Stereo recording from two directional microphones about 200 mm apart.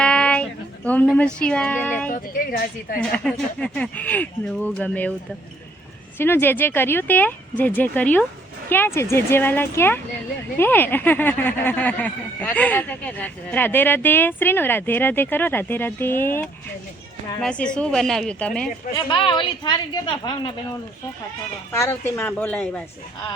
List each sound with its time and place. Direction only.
0.0 s a sound: 5° left (ahead or behind)
1.1 s a woman's voice: 5° left (ahead or behind)
2.0 s speech: 45° left (ahead or behind)
3.0 s speech: 5° left (ahead or behind)
6.1 s a woman's voice: 10° left (ahead or behind)
18.9 s speech: 25° left (ahead or behind)
21.7 s speech: 10° left (ahead or behind)